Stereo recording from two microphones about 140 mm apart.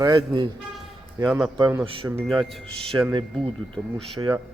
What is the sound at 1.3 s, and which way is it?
Speech, 5° right (ahead or behind).